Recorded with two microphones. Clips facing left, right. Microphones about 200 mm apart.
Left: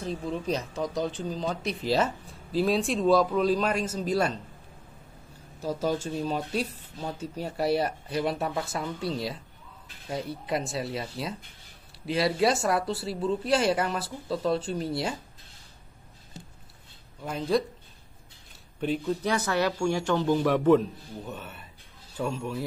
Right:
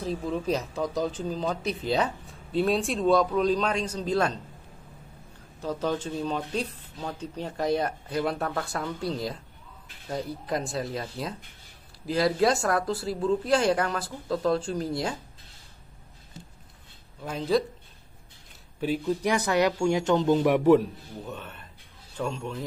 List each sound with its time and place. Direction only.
0.0 s speech: centre (ahead or behind)
5.6 s speech: 10° left (ahead or behind)
17.2 s speech: centre (ahead or behind)
18.8 s speech: 5° right (ahead or behind)
19.2 s speech: 15° right (ahead or behind)
21.3 s speech: 5° left (ahead or behind)